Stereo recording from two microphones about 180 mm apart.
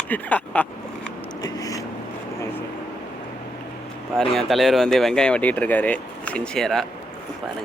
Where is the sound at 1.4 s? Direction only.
20° left (ahead or behind).